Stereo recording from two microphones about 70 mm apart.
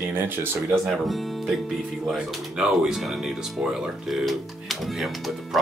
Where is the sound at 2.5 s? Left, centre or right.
Centre.